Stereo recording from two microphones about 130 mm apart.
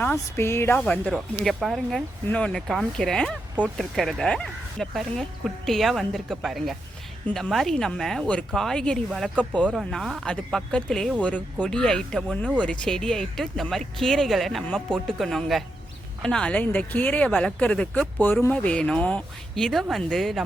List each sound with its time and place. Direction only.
0.0 s speech: 15° left (ahead or behind)
1.0 s speech: centre (ahead or behind)